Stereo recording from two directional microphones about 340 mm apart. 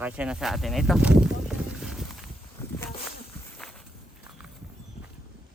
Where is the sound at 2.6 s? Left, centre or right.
Centre.